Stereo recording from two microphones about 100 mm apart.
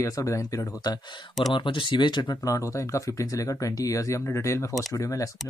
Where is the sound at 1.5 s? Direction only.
55° left (ahead or behind).